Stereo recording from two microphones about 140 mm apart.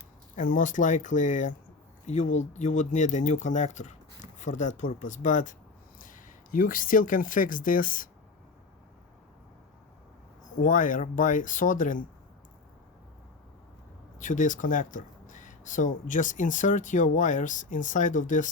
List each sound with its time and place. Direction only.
0.3 s speech: 70° left (ahead or behind)
10.6 s speech: 70° left (ahead or behind)
14.2 s speech: 65° left (ahead or behind)